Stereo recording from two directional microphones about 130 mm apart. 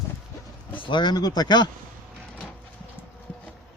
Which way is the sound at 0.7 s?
40° left (ahead or behind).